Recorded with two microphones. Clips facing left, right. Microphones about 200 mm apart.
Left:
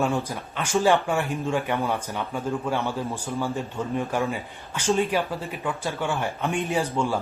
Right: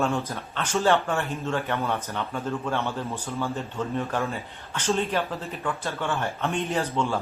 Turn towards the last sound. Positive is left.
turn(degrees=10)  # may be behind; listen again after turning